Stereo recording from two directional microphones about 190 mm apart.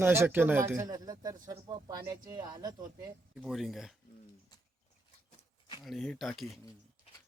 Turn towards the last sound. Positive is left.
turn(degrees=0)  # may be behind; listen again after turning